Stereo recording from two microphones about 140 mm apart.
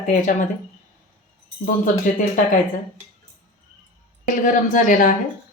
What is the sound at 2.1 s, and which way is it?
Speech, 70° left (ahead or behind).